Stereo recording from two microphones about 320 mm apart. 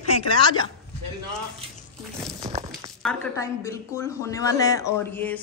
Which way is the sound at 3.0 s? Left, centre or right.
Centre.